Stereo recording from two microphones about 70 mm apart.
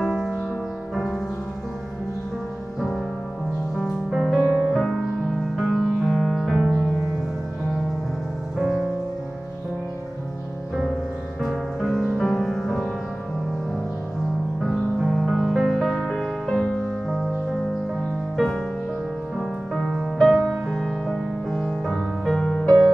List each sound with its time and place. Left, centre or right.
0.0 s music: centre
4.1 s music: centre
4.4 s music: centre
4.7 s music: centre
8.5 s music: centre
11.4 s music: centre
14.7 s music: centre